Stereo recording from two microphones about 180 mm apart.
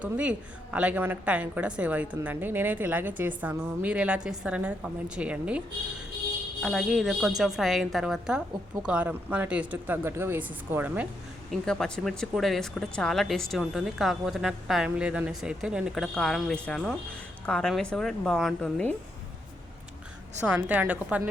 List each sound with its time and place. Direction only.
0.0 s a woman's voice: 5° right (ahead or behind)
11.5 s a woman's voice: 5° left (ahead or behind)
20.6 s a woman's voice: 10° right (ahead or behind)